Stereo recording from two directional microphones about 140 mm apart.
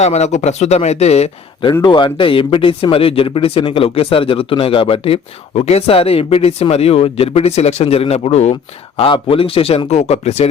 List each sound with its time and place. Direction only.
0.0 s speech: 55° left (ahead or behind)
1.8 s speech: 35° left (ahead or behind); by 8.5 s 50° left (ahead or behind)
9.0 s speech: 40° left (ahead or behind)